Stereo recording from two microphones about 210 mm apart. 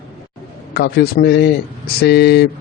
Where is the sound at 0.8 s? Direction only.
50° left (ahead or behind).